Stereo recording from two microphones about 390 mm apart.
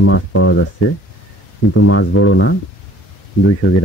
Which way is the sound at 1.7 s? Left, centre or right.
Left.